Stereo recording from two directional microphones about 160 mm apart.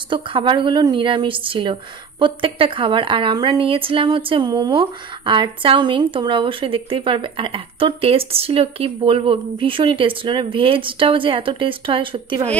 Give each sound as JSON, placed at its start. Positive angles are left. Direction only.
{"t": 0.1, "sound": "a woman's voice", "side_deg": -30}